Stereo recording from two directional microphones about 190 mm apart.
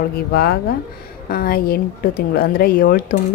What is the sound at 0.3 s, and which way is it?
A woman's voice, 55° left (ahead or behind).